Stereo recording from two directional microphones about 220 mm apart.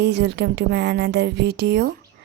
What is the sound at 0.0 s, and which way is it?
Speech, 50° right (ahead or behind).